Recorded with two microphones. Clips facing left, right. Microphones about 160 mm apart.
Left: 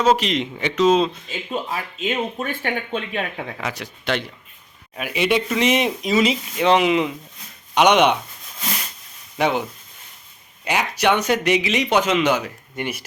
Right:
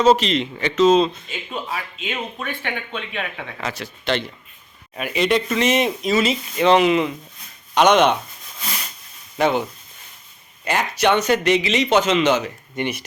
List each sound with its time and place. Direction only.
0.2 s speech: 10° left (ahead or behind)
1.7 s speech: 40° left (ahead or behind)
3.6 s speech: 10° left (ahead or behind)
9.4 s speech: 10° left (ahead or behind)
10.7 s speech: 10° left (ahead or behind)